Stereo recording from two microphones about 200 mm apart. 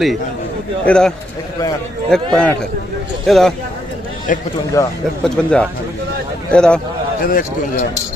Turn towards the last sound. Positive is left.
turn(degrees=40)  # may be behind; listen again after turning